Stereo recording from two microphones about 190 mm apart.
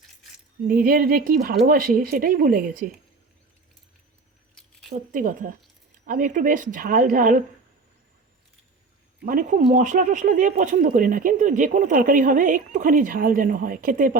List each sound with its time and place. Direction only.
0.7 s speech: 50° right (ahead or behind)
4.9 s speech: 45° right (ahead or behind)
9.2 s speech: 45° right (ahead or behind)